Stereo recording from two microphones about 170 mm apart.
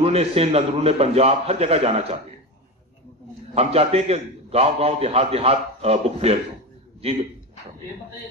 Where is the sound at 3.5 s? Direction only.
35° right (ahead or behind).